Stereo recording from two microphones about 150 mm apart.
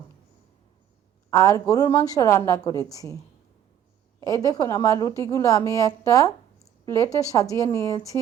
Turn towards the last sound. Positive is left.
turn(degrees=20)  # may be behind; listen again after turning